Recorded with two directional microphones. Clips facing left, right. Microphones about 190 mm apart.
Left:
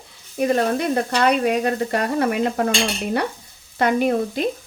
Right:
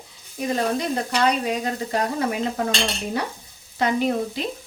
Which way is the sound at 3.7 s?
55° left (ahead or behind).